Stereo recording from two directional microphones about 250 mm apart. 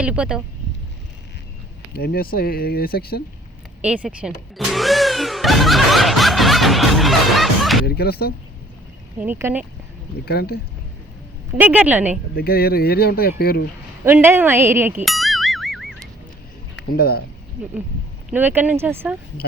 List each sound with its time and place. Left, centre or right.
0.0 s speech: centre
1.9 s speech: left
3.8 s a sound: centre
7.9 s speech: left
9.2 s speech: centre
10.2 s speech: left
11.6 s speech: centre
12.3 s speech: left
14.0 s music: centre
17.0 s speech: left
18.3 s speech: centre